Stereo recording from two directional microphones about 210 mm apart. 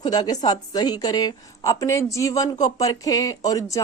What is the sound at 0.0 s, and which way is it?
A woman's voice, 20° left (ahead or behind).